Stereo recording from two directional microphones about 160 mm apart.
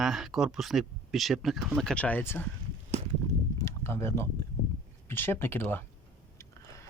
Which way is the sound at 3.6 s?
15° left (ahead or behind).